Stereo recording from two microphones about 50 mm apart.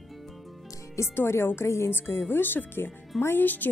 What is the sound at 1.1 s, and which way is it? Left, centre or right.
Speech, left.